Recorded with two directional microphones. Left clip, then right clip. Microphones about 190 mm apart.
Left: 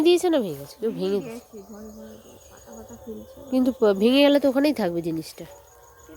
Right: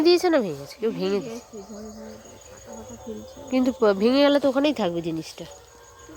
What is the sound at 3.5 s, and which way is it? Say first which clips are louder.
Speech: even; 25° left (ahead or behind).